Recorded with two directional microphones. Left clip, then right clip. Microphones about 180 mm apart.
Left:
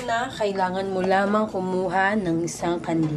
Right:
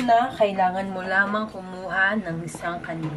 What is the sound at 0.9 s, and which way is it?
Speech, 15° left (ahead or behind).